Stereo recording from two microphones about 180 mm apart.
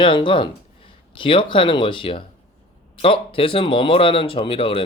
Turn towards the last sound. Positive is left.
turn(degrees=30)  # may be behind; listen again after turning